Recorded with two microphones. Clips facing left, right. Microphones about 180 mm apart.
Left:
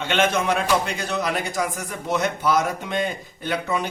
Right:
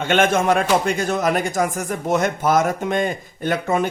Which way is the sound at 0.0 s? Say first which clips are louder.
Right 4 dB; 50° right (ahead or behind).